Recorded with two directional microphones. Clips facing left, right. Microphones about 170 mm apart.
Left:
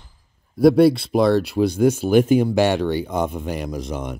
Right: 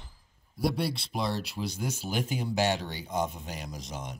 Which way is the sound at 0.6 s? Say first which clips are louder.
Left 17 dB; 60° left (ahead or behind).